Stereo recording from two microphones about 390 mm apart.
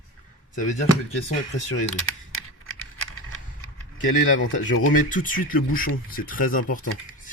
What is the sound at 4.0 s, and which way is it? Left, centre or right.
Speech, left.